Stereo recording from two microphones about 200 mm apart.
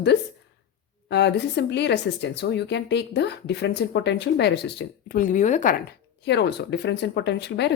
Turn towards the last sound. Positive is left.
turn(degrees=60)  # may be behind; listen again after turning